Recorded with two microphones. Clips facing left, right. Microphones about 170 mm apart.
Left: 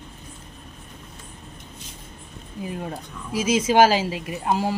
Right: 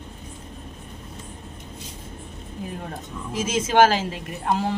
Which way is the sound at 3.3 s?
10° left (ahead or behind).